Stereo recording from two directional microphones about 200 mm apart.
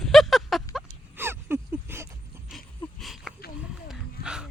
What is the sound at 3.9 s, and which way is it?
Dog, 5° right (ahead or behind).